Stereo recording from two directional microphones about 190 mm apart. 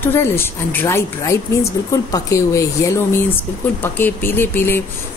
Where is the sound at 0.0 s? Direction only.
10° left (ahead or behind).